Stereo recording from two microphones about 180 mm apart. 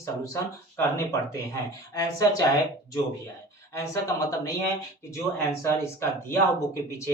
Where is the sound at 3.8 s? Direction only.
15° left (ahead or behind).